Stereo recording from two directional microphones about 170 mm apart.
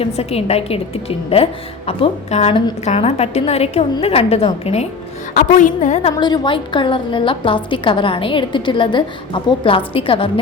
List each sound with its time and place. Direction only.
0.0 s a woman's voice: 35° left (ahead or behind)
5.3 s a woman's voice: 50° left (ahead or behind)
6.1 s a woman's voice: 25° left (ahead or behind)